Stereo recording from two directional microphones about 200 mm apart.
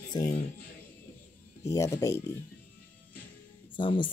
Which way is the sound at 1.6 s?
15° left (ahead or behind).